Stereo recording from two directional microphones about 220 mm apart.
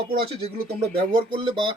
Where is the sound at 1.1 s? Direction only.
20° right (ahead or behind).